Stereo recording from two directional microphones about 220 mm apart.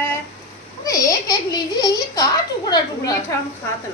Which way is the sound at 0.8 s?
15° left (ahead or behind).